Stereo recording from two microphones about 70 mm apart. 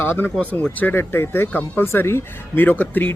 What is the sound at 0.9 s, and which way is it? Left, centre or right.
Speech, left.